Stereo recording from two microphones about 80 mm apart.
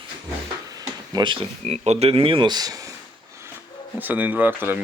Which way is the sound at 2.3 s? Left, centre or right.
Right.